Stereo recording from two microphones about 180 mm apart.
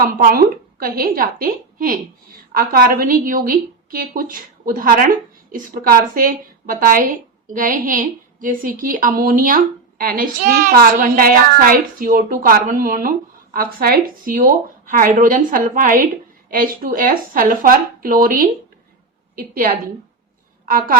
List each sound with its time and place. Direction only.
0.0 s a woman's voice: 55° right (ahead or behind)